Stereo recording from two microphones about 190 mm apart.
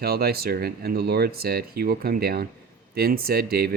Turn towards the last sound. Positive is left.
turn(degrees=-55)  # may be behind; listen again after turning